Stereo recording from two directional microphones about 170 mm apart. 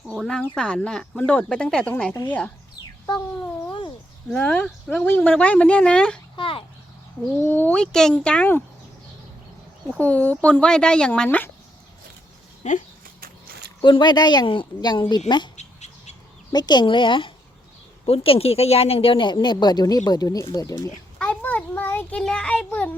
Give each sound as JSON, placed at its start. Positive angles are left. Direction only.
{"t": 0.1, "sound": "speech", "side_deg": 0}
{"t": 3.4, "sound": "a sound", "side_deg": 25}
{"t": 4.3, "sound": "speech", "side_deg": 5}
{"t": 6.3, "sound": "speech", "side_deg": 30}
{"t": 7.4, "sound": "speech", "side_deg": 10}
{"t": 10.0, "sound": "speech", "side_deg": 10}
{"t": 12.6, "sound": "speech", "side_deg": 45}
{"t": 13.2, "sound": "a sound", "side_deg": -65}
{"t": 13.8, "sound": "speech", "side_deg": 25}
{"t": 15.5, "sound": "bird", "side_deg": 40}
{"t": 16.5, "sound": "speech", "side_deg": 25}
{"t": 21.2, "sound": "a sound", "side_deg": 10}